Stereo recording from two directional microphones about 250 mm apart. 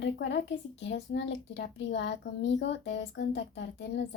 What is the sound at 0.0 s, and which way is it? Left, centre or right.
Speech, left.